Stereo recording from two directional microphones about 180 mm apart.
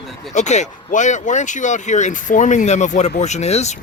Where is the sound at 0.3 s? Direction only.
40° left (ahead or behind).